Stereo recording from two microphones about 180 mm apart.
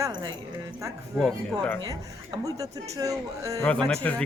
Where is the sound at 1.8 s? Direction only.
20° right (ahead or behind).